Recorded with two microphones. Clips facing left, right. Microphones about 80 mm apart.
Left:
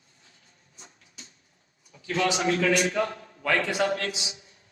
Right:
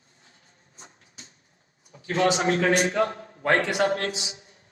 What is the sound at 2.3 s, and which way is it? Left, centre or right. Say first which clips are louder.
A man's voice: right 2 dB; right.